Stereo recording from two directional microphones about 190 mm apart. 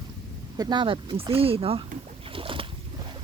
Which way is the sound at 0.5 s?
20° right (ahead or behind).